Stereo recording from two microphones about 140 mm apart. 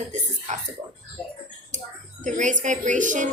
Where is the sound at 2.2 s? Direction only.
65° right (ahead or behind).